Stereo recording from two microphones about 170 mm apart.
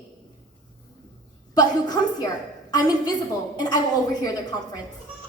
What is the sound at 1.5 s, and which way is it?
A woman's voice, 25° left (ahead or behind).